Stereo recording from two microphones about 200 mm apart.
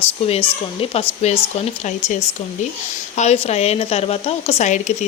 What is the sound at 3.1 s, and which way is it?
Speech, 30° left (ahead or behind).